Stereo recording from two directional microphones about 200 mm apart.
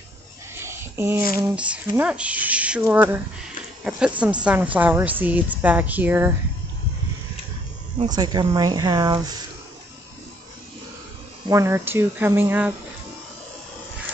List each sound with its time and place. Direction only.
0.6 s a sound: 10° right (ahead or behind)
1.4 s speech: 5° right (ahead or behind)
4.2 s speech: 5° right (ahead or behind)
8.1 s speech: 20° right (ahead or behind)
11.4 s speech: 15° right (ahead or behind)